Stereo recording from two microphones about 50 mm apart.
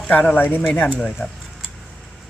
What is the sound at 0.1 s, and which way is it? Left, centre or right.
Speech, left.